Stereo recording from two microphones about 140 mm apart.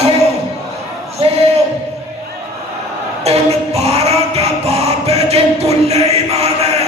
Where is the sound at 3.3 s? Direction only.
50° right (ahead or behind).